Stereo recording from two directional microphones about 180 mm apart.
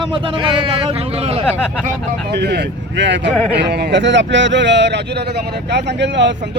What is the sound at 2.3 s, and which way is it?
Speech, 70° right (ahead or behind).